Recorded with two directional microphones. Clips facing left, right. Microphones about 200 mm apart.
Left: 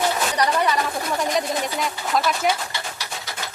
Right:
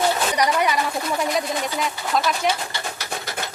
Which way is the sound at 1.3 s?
Centre (ahead or behind).